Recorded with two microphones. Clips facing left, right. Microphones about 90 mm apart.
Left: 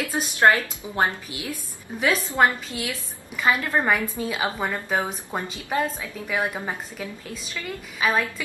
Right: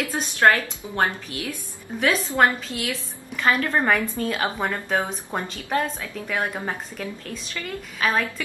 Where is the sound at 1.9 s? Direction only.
5° left (ahead or behind).